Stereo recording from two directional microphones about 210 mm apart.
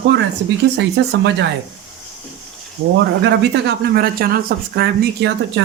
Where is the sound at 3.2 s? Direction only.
50° right (ahead or behind).